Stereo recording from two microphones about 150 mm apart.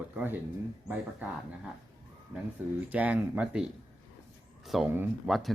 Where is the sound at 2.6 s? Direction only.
10° right (ahead or behind).